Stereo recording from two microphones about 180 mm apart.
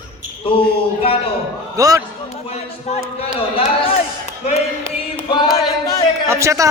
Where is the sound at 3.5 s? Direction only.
30° left (ahead or behind).